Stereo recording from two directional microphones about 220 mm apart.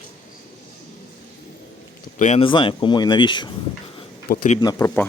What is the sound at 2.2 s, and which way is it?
Speech, 30° left (ahead or behind).